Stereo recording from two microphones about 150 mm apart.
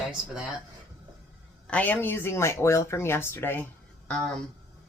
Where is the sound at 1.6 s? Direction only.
10° left (ahead or behind).